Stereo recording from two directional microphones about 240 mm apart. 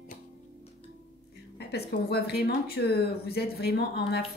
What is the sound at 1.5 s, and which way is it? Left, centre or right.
A woman's voice, left.